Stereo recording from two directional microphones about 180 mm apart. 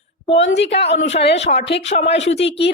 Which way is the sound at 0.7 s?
35° left (ahead or behind).